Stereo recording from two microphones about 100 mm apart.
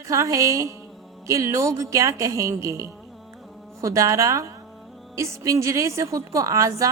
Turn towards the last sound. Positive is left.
turn(degrees=-35)  # may be behind; listen again after turning